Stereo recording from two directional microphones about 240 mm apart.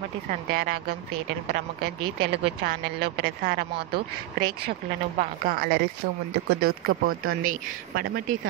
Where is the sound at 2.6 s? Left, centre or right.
Right.